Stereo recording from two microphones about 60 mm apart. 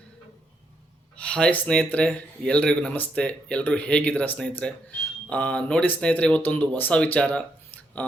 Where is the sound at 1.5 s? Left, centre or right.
Left.